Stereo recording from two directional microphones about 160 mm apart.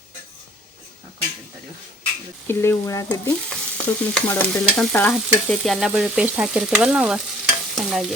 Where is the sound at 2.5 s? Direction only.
15° left (ahead or behind).